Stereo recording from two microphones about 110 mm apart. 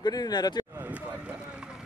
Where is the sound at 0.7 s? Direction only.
15° right (ahead or behind).